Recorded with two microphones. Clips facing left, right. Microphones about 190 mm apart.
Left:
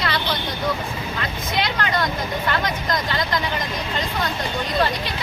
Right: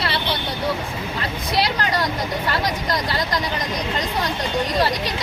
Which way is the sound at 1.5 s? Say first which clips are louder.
Right 2 dB; 35° right (ahead or behind).